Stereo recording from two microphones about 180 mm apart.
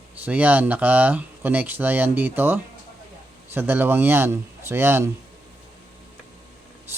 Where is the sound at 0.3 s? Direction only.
10° right (ahead or behind).